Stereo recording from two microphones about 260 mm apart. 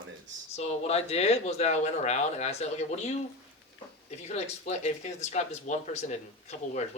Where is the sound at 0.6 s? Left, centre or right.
Left.